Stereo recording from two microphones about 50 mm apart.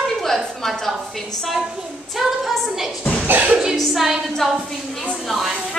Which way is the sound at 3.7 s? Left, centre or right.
Centre.